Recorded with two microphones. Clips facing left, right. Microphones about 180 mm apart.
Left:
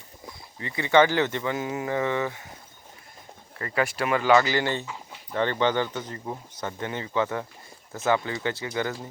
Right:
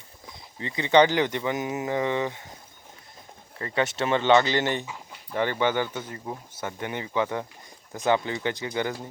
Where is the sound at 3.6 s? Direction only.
25° right (ahead or behind).